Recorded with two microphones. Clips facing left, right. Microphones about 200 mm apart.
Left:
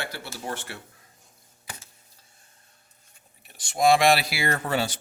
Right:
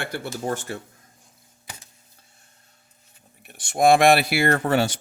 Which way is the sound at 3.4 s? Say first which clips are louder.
Right 3 dB; 60° right (ahead or behind).